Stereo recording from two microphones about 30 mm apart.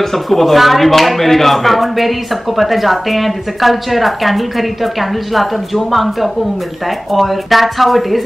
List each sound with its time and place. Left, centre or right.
0.3 s speech: centre
7.2 s speech: centre